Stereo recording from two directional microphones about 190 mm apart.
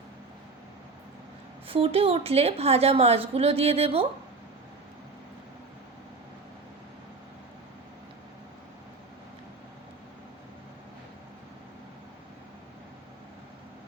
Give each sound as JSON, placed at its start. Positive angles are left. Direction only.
{"t": 1.6, "sound": "a woman's voice", "side_deg": -30}